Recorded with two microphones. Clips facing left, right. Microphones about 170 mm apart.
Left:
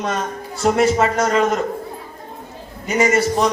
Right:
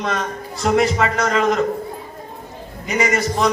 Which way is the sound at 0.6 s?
40° left (ahead or behind).